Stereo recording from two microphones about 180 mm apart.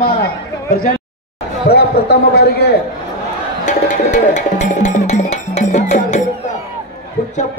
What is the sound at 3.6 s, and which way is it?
Music, 45° left (ahead or behind).